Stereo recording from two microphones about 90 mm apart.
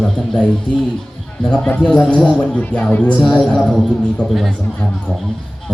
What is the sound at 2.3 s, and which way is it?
Speech, 15° left (ahead or behind).